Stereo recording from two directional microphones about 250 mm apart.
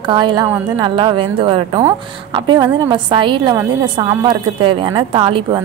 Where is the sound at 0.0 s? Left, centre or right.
Centre.